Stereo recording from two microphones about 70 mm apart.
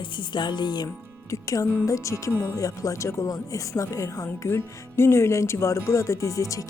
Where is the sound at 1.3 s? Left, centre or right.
Left.